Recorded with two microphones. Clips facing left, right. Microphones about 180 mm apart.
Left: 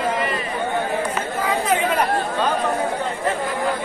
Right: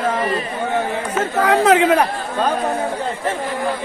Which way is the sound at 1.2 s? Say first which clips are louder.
Right 7 dB; 85° right.